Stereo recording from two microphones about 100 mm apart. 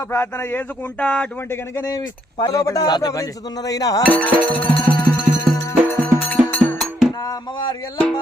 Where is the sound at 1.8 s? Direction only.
40° left (ahead or behind).